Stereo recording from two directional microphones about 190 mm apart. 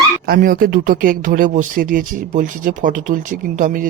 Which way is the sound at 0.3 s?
50° right (ahead or behind).